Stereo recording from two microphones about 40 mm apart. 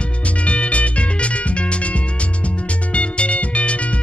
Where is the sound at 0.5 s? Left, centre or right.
Left.